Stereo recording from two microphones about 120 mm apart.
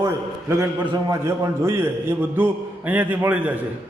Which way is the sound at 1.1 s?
25° right (ahead or behind).